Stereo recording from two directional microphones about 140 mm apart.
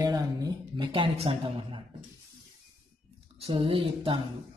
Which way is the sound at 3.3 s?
40° right (ahead or behind).